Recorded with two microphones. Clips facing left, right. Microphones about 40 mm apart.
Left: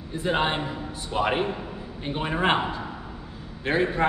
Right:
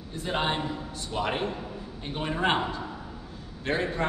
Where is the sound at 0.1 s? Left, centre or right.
Centre.